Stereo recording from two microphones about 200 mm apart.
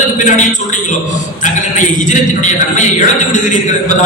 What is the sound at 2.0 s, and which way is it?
Speech, 40° left (ahead or behind).